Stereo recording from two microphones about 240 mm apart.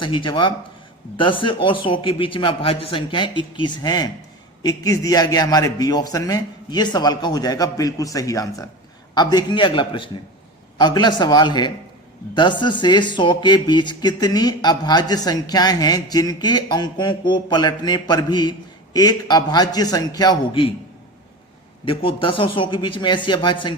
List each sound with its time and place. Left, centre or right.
0.0 s a man's voice: left
21.8 s a man's voice: left